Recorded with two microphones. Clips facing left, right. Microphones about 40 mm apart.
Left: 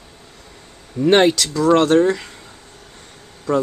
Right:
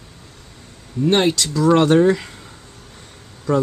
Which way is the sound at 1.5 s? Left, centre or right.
Centre.